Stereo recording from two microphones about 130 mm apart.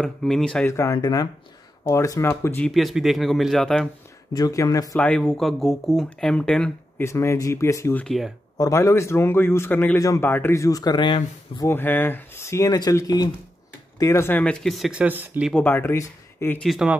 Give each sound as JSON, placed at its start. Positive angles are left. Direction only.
{"t": 0.0, "sound": "speech", "side_deg": 5}
{"t": 0.7, "sound": "speech", "side_deg": 25}
{"t": 2.6, "sound": "speech", "side_deg": 0}
{"t": 4.3, "sound": "speech", "side_deg": 30}
{"t": 4.9, "sound": "speech", "side_deg": 10}
{"t": 7.0, "sound": "speech", "side_deg": 20}
{"t": 8.0, "sound": "speech", "side_deg": 0}
{"t": 8.5, "sound": "speech", "side_deg": 25}
{"t": 11.6, "sound": "speech", "side_deg": 15}
{"t": 14.4, "sound": "speech", "side_deg": 5}
{"t": 15.5, "sound": "speech", "side_deg": 15}
{"t": 16.6, "sound": "speech", "side_deg": -5}